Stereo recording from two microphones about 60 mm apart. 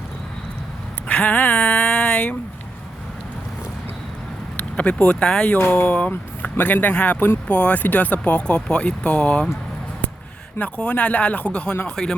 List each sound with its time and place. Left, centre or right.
1.0 s a sound: left
4.5 s speech: centre
5.5 s speech: left
10.6 s speech: left